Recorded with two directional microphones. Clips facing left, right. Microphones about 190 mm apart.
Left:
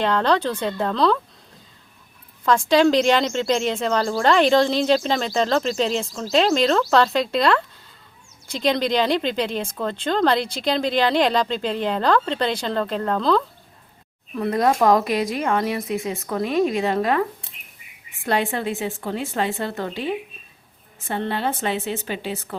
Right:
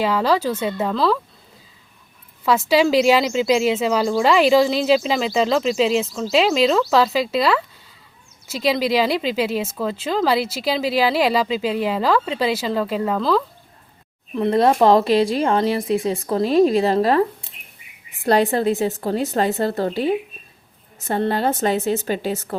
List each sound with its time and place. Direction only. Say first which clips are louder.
0.0 s speech: right 1 dB; 5° right (ahead or behind)
2.4 s speech: even; 5° right (ahead or behind)
14.3 s speech: right 4 dB; 25° right (ahead or behind); by 22.5 s 40° right (ahead or behind)